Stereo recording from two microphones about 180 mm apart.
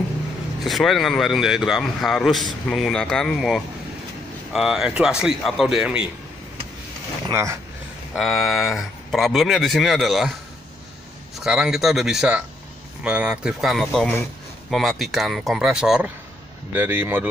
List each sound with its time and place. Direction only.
0.7 s a man's voice: centre (ahead or behind)
7.2 s speech: 15° right (ahead or behind)
8.2 s a man's voice: centre (ahead or behind)
11.3 s a man's voice: 5° right (ahead or behind)